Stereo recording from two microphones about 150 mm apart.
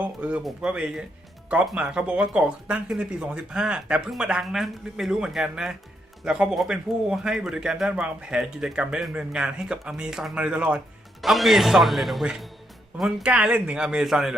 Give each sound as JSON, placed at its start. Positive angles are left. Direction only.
{"t": 0.0, "sound": "speech", "side_deg": -10}